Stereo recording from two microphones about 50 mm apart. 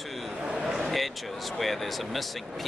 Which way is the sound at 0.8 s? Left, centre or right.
Centre.